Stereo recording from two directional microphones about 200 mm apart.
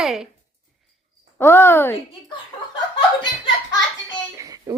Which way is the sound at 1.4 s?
10° left (ahead or behind).